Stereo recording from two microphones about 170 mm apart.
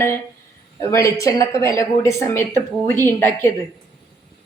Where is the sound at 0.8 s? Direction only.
15° left (ahead or behind).